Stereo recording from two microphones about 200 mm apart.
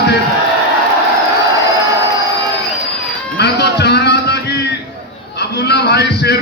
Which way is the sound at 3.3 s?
55° left (ahead or behind).